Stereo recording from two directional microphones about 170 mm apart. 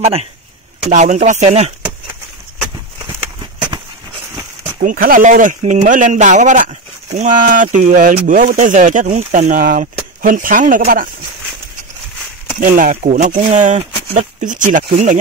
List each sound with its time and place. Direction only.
0.0 s a man's voice: 35° right (ahead or behind)
4.7 s speech: 55° right (ahead or behind)
12.5 s speech: 50° right (ahead or behind)